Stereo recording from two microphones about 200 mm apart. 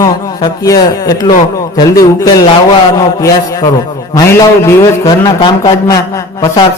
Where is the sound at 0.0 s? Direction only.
20° left (ahead or behind).